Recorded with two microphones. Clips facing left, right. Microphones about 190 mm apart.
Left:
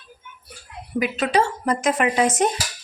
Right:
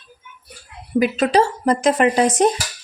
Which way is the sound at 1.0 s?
35° right (ahead or behind).